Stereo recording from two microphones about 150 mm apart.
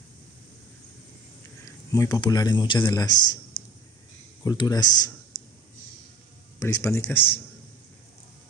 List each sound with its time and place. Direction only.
1.9 s a man's voice: 25° left (ahead or behind)
4.5 s a man's voice: 25° left (ahead or behind)
6.6 s speech: 20° left (ahead or behind)